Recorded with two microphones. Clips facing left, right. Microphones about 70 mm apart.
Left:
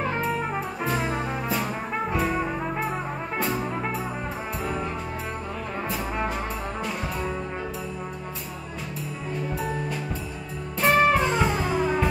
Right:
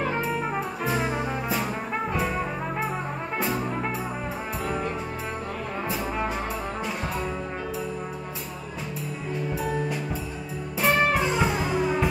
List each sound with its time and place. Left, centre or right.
0.2 s brass instrument: centre
3.3 s music: centre
5.9 s brass instrument: centre
10.8 s music: centre